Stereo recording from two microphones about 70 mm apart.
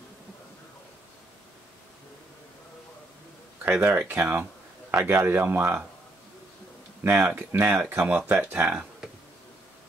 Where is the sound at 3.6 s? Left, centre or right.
Right.